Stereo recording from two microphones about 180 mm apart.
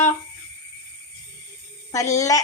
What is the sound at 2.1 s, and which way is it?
Speech, 15° left (ahead or behind).